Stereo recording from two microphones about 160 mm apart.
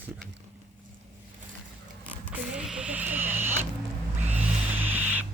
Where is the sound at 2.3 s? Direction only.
5° right (ahead or behind).